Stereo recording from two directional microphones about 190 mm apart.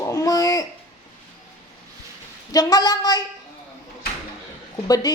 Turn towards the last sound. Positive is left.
turn(degrees=20)  # may be behind; listen again after turning